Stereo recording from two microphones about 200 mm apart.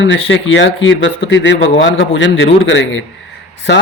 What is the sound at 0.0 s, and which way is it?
A man's voice, 70° left (ahead or behind).